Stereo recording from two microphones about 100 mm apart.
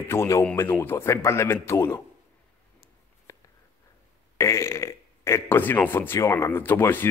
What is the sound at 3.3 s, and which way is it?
Writing, 30° left (ahead or behind).